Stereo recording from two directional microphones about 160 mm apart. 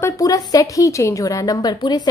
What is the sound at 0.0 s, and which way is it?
A woman's voice, 20° left (ahead or behind).